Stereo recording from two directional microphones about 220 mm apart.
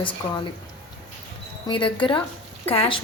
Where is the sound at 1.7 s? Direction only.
20° left (ahead or behind).